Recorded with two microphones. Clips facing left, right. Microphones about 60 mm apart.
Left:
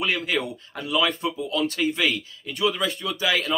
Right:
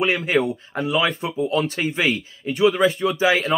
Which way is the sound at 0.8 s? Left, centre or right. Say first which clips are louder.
Right 2 dB; right.